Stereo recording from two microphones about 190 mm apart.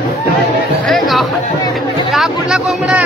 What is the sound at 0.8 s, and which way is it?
Chatter, centre (ahead or behind).